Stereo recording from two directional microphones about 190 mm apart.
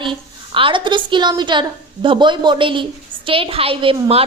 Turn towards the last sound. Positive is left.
turn(degrees=-30)  # may be behind; listen again after turning